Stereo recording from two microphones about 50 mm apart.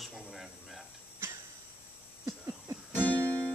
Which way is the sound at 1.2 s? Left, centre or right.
Right.